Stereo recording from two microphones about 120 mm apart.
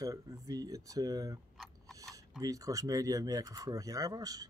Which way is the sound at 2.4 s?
30° right (ahead or behind).